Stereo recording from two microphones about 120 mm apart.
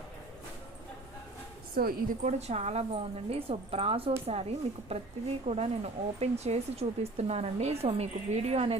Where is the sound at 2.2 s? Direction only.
70° right (ahead or behind).